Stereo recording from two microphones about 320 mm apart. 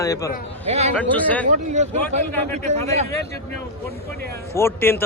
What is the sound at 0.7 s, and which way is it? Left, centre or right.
Speech, centre.